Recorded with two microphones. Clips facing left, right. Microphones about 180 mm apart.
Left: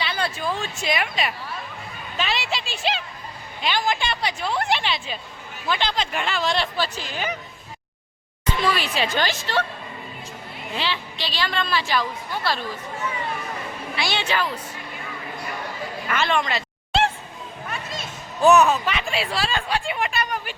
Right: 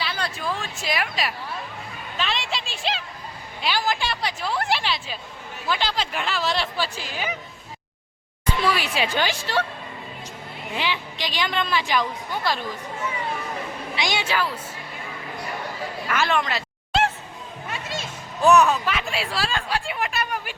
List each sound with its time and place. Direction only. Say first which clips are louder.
0.0 s speech: left 2 dB; centre (ahead or behind)
2.1 s a sound: left 2 dB; 5° left (ahead or behind)
3.6 s speech: left 1 dB; 5° right (ahead or behind)
8.6 s a woman's voice: even; 10° right (ahead or behind)
10.8 s a woman's voice: even; 15° right (ahead or behind)
13.9 s a woman's voice: even; 15° right (ahead or behind)
16.0 s a sound: even; 5° right (ahead or behind)
18.4 s speech: left 1 dB; centre (ahead or behind)